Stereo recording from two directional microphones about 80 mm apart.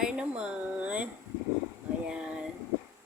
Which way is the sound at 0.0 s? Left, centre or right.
Centre.